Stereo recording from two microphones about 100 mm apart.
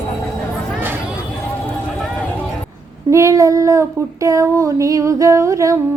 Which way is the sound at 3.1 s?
35° right (ahead or behind).